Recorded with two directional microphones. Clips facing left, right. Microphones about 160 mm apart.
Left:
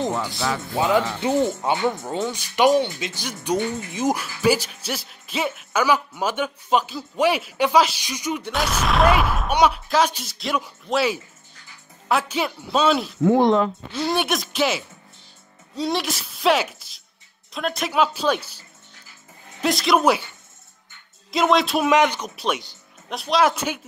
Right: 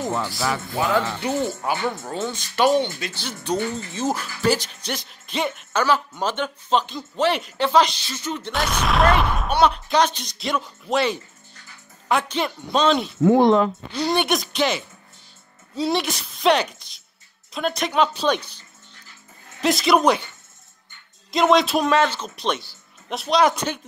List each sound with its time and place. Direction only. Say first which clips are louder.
0.0 s speech: even; 20° left (ahead or behind)
8.5 s a woman's voice: even; centre (ahead or behind)
21.3 s speech: right 2 dB; centre (ahead or behind)
21.8 s speech: left 1 dB; 15° left (ahead or behind)
22.3 s speech: even; 5° left (ahead or behind)